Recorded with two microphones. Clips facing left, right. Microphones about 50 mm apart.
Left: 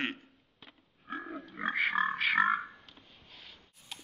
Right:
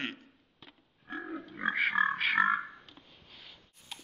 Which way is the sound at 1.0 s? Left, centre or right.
Centre.